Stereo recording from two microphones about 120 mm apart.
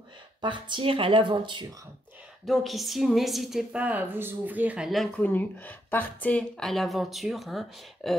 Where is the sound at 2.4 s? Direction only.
Centre (ahead or behind).